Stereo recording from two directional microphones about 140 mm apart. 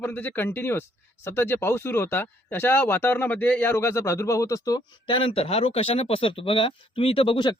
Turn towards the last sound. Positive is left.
turn(degrees=35)  # may be behind; listen again after turning